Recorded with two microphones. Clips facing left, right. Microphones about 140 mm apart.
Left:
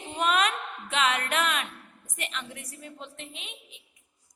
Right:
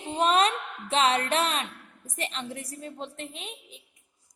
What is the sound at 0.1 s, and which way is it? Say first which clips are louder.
Music: right 3 dB; 30° right (ahead or behind).